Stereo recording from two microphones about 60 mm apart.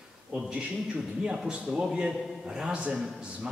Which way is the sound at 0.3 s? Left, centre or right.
Centre.